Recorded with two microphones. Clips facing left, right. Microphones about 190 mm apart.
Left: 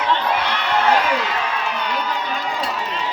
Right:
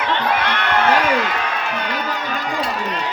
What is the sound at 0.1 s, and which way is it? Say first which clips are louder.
Crowd: right 1 dB; 55° right (ahead or behind).